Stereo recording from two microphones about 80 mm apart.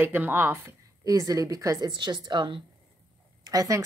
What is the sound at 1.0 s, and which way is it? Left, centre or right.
Speech, right.